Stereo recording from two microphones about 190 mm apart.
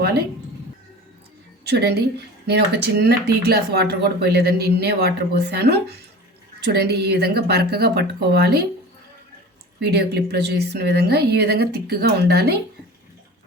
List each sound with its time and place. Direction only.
1.7 s speech: 60° right (ahead or behind)
9.8 s speech: 60° right (ahead or behind)